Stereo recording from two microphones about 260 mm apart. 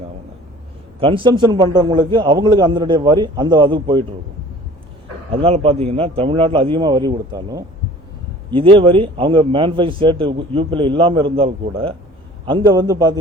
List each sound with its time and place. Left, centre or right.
0.9 s a man's voice: centre
5.3 s a man's voice: right